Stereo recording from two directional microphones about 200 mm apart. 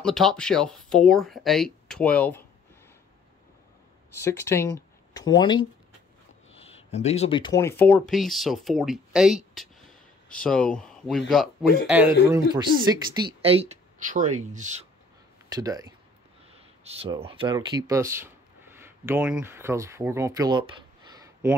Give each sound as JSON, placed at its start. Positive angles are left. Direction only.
{"t": 0.0, "sound": "speech", "side_deg": 0}
{"t": 4.1, "sound": "a man's voice", "side_deg": 15}
{"t": 12.7, "sound": "a woman's voice", "side_deg": -45}
{"t": 13.2, "sound": "speech", "side_deg": -25}
{"t": 15.5, "sound": "a man's voice", "side_deg": -20}
{"t": 16.8, "sound": "speech", "side_deg": -30}
{"t": 21.1, "sound": "a sound", "side_deg": -15}